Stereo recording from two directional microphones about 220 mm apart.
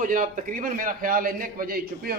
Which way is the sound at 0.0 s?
35° right (ahead or behind).